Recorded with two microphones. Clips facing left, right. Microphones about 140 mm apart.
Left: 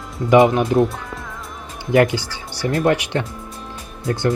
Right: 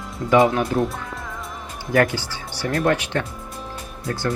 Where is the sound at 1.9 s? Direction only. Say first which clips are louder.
Left 4 dB; 20° left (ahead or behind).